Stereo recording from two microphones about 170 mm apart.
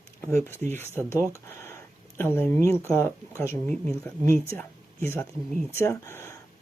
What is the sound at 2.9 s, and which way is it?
Speech, 15° left (ahead or behind).